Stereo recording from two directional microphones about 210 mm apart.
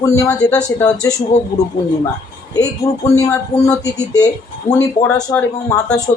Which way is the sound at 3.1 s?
15° left (ahead or behind).